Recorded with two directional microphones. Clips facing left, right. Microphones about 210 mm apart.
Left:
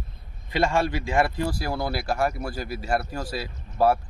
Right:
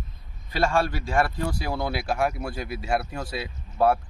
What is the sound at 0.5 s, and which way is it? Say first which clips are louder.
Speech: left 1 dB; 20° left (ahead or behind).